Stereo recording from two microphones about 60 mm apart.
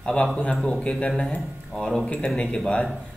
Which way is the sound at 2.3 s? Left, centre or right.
Centre.